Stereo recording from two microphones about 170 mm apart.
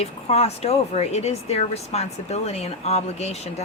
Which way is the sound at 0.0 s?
40° left (ahead or behind).